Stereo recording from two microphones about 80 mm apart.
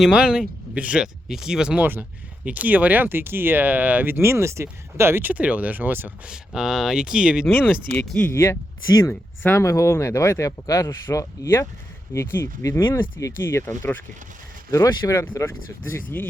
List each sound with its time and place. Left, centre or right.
0.0 s speech: centre
1.7 s speech: right
6.2 s speech: centre
7.9 s speech: centre
8.3 s speech: left
15.0 s speech: left